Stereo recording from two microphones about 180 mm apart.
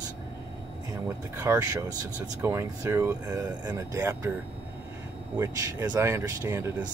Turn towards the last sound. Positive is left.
turn(degrees=-15)  # may be behind; listen again after turning